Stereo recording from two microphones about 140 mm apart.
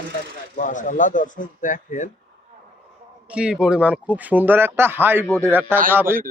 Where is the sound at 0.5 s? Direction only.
65° left (ahead or behind).